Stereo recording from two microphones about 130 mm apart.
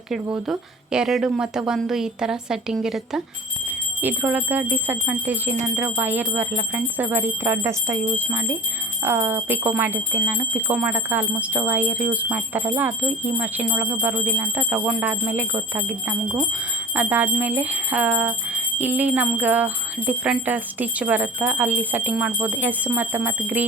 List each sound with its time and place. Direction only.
0.1 s a woman's voice: 5° right (ahead or behind)
4.0 s jingle bell: 15° right (ahead or behind)